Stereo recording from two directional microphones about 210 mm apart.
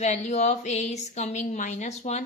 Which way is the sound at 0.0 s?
35° left (ahead or behind).